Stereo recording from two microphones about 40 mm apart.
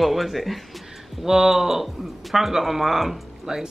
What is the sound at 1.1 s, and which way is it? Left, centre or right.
Speech, centre.